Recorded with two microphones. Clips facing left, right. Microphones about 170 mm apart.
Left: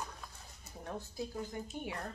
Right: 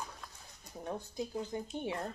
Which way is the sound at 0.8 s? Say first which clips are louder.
Right 2 dB; 15° right (ahead or behind).